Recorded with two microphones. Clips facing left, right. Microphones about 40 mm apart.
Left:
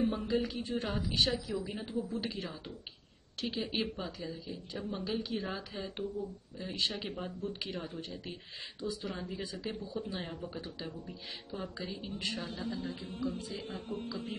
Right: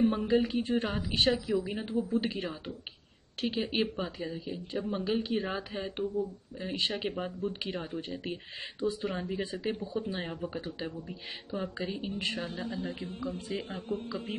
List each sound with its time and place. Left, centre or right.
0.0 s speech: right
1.6 s speech: right